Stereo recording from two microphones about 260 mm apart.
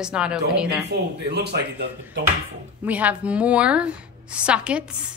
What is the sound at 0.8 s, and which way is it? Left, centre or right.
Speech, right.